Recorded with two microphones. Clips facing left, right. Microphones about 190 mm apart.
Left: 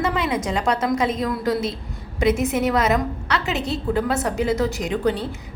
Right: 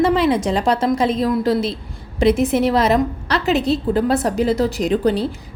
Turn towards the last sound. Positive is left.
turn(degrees=-35)  # may be behind; listen again after turning